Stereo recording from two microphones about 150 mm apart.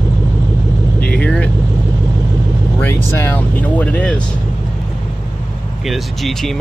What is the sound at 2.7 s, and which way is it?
Speech, 15° left (ahead or behind).